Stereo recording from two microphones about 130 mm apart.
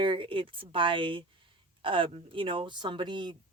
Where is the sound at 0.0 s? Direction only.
40° right (ahead or behind).